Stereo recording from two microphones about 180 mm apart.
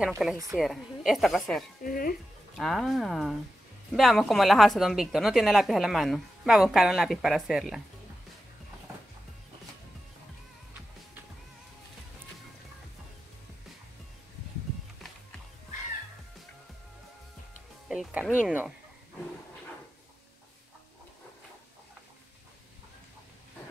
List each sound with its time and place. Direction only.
0.2 s speech: 5° right (ahead or behind)
1.8 s speech: 50° left (ahead or behind)
2.5 s speech: centre (ahead or behind)
17.8 s speech: 5° right (ahead or behind)